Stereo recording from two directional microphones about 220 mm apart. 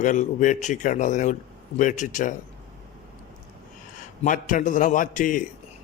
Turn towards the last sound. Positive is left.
turn(degrees=35)  # may be behind; listen again after turning